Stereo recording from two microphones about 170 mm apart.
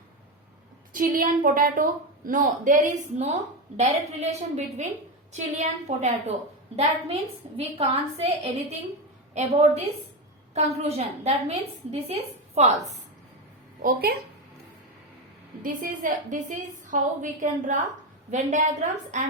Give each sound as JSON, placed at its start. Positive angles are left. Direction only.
{"t": 0.9, "sound": "a woman's voice", "side_deg": -55}
{"t": 7.5, "sound": "a woman's voice", "side_deg": -35}
{"t": 9.3, "sound": "a woman's voice", "side_deg": -40}
{"t": 13.8, "sound": "speech", "side_deg": -60}
{"t": 15.6, "sound": "a woman's voice", "side_deg": -50}